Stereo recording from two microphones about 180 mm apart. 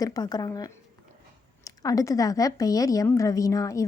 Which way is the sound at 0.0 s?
20° left (ahead or behind).